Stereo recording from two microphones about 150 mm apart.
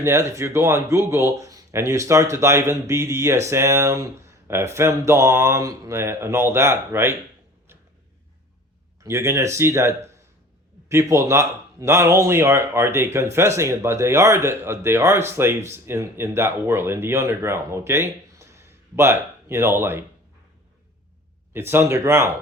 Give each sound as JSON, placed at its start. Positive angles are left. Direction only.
{"t": 0.0, "sound": "speech", "side_deg": -20}
{"t": 9.0, "sound": "speech", "side_deg": -20}
{"t": 21.5, "sound": "speech", "side_deg": -15}